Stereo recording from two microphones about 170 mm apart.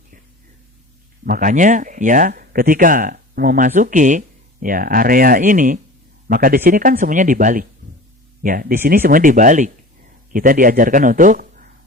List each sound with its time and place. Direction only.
1.2 s speech: 55° right (ahead or behind)